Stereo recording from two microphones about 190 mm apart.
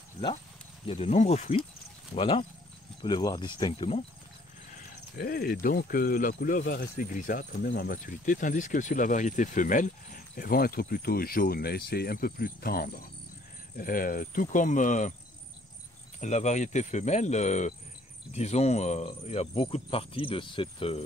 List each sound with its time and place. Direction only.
0.8 s speech: 35° left (ahead or behind)
5.1 s speech: 55° left (ahead or behind)
6.6 s speech: 55° left (ahead or behind); by 15.1 s 40° left (ahead or behind)
16.2 s speech: 40° left (ahead or behind)